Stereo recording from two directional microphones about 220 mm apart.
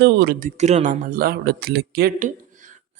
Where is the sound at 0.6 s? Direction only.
30° right (ahead or behind).